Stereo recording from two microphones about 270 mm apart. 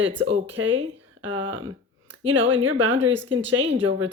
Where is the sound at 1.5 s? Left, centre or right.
Right.